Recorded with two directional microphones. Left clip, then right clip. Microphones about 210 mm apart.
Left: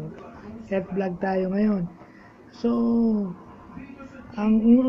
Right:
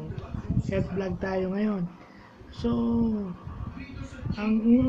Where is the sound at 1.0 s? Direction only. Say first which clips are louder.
Left 4 dB; 10° left (ahead or behind).